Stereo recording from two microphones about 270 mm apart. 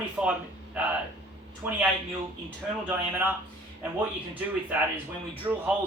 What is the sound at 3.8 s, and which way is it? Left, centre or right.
Speech, centre.